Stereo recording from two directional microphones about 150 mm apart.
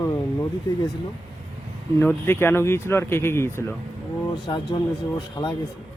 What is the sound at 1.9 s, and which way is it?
Speech, 15° left (ahead or behind).